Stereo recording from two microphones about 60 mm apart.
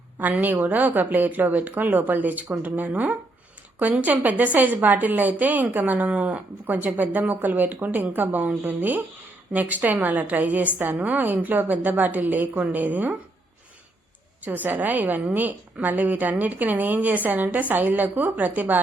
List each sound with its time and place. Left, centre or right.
0.2 s a woman's voice: right
14.4 s a woman's voice: right